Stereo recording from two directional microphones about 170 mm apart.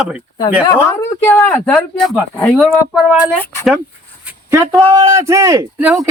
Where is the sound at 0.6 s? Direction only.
15° left (ahead or behind); by 3.2 s centre (ahead or behind).